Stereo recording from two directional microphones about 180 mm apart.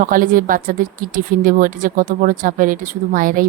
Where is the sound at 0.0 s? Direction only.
50° right (ahead or behind).